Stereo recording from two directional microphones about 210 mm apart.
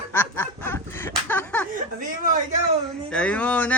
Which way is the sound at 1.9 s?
40° right (ahead or behind).